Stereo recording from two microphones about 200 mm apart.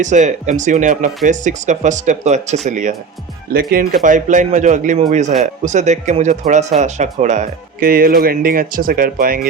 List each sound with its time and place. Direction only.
0.0 s speech: 35° right (ahead or behind)
3.5 s speech: 50° right (ahead or behind)